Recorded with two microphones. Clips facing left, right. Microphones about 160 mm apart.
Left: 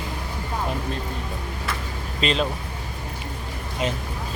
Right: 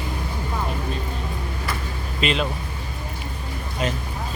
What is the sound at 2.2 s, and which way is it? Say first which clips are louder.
Speech: even; 35° left (ahead or behind).